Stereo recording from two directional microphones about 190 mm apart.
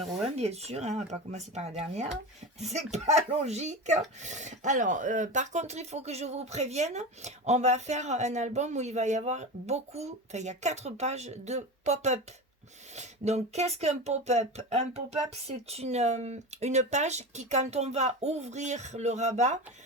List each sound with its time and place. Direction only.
0.3 s speech: 35° right (ahead or behind)